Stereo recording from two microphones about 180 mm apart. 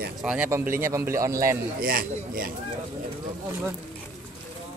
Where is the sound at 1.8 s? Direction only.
55° right (ahead or behind).